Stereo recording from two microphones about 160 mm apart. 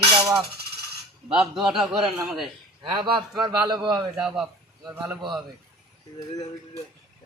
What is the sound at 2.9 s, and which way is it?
A man's voice, 30° right (ahead or behind).